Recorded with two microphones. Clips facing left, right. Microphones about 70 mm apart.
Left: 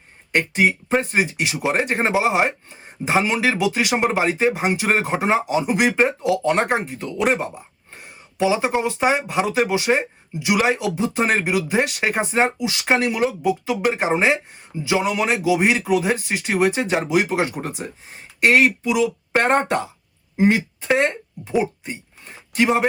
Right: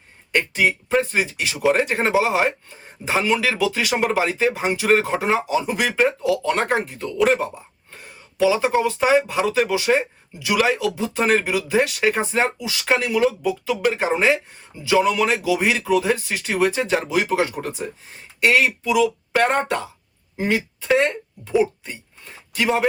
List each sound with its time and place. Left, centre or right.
0.3 s speech: left
8.0 s a sound: left
8.8 s speech: left
18.3 s speech: left
19.6 s speech: left